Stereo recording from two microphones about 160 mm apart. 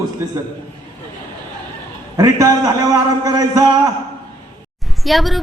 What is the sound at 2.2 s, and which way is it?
Speech, 25° right (ahead or behind).